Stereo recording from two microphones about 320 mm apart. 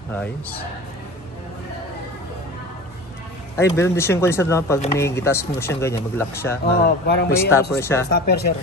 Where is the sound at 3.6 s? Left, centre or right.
Centre.